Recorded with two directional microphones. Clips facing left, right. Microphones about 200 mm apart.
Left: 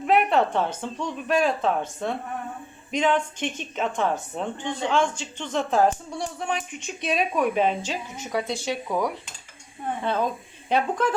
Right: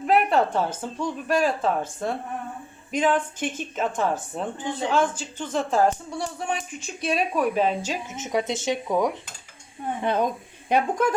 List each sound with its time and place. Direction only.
0.1 s a woman's voice: centre (ahead or behind)
8.1 s speech: 20° right (ahead or behind)